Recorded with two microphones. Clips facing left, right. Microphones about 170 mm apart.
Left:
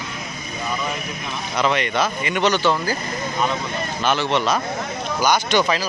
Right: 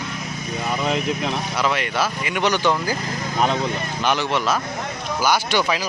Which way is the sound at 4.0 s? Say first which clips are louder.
Left 1 dB; 15° right (ahead or behind).